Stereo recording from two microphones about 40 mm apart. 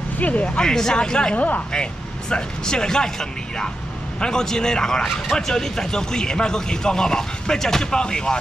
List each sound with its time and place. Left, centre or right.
0.2 s speech: left
0.6 s speech: centre
1.3 s speech: left
1.7 s speech: left